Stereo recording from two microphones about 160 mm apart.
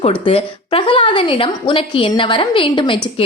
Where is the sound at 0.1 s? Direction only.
35° left (ahead or behind).